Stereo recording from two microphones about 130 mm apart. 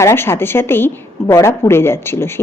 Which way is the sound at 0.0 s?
20° left (ahead or behind).